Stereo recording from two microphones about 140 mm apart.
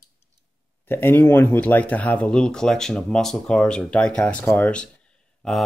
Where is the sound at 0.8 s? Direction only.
15° left (ahead or behind).